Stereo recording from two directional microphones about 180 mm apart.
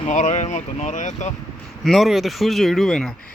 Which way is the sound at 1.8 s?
Centre (ahead or behind).